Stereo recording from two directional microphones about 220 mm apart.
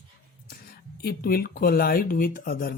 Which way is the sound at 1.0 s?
45° left (ahead or behind).